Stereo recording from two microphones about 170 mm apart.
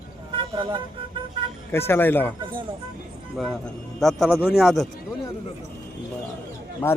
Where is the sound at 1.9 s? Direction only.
10° left (ahead or behind).